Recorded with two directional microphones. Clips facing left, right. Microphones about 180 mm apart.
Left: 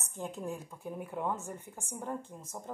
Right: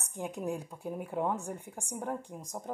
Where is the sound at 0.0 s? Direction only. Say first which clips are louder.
Right 3 dB; 15° right (ahead or behind).